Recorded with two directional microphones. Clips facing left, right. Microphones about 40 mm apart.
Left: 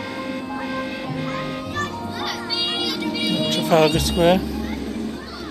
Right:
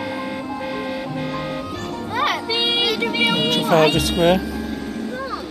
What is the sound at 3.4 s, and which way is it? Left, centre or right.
Music, centre.